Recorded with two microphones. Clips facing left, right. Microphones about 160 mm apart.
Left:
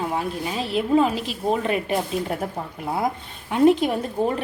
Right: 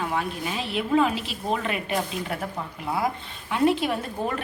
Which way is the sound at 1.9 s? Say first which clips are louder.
Left 4 dB; 30° left (ahead or behind).